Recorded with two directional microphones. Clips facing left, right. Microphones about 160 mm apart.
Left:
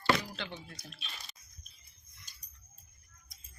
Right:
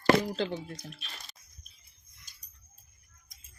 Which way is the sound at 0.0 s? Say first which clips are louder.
Right 7 dB; 45° right (ahead or behind).